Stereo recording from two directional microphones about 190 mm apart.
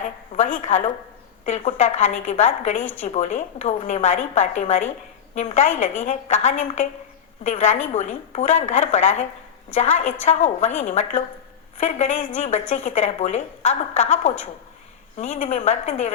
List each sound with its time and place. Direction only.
0.3 s speech: 40° left (ahead or behind)